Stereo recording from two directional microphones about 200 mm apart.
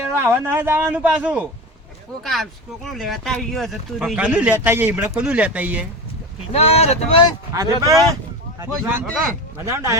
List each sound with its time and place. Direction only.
0.1 s speech: 10° right (ahead or behind)
6.5 s speech: 30° left (ahead or behind)
7.5 s speech: 15° right (ahead or behind)